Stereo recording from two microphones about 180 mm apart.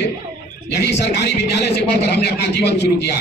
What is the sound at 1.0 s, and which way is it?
A man's voice, 65° left (ahead or behind).